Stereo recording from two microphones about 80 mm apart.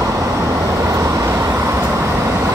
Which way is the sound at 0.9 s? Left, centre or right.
Right.